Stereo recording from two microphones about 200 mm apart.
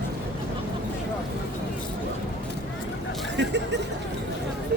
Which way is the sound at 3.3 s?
60° right (ahead or behind).